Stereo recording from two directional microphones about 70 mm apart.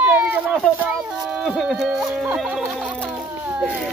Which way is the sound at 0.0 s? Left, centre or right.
Right.